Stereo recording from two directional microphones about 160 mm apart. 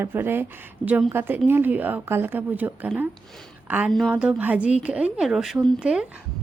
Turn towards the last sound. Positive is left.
turn(degrees=-5)  # may be behind; listen again after turning